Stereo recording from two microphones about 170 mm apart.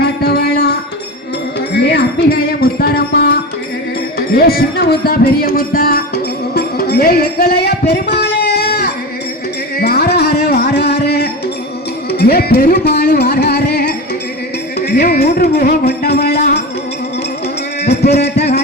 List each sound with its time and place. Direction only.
0.0 s music: 70° left (ahead or behind)
2.3 s music: 65° left (ahead or behind)
4.4 s speech: 60° left (ahead or behind); by 8.7 s 80° left
9.8 s music: 75° left (ahead or behind)
12.1 s speech: 65° left (ahead or behind)
14.8 s music: 70° left (ahead or behind)
17.8 s music: 75° left (ahead or behind)